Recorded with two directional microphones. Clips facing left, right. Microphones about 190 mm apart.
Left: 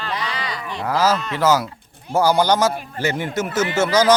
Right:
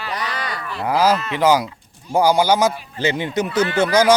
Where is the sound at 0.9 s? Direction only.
15° right (ahead or behind).